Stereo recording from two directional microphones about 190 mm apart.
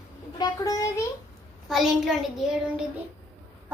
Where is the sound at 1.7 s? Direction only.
Centre (ahead or behind).